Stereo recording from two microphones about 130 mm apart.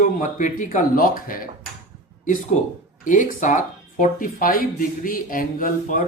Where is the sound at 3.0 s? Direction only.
85° left.